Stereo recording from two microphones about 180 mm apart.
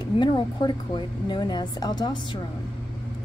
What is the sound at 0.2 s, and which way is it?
A woman's voice, 25° left (ahead or behind).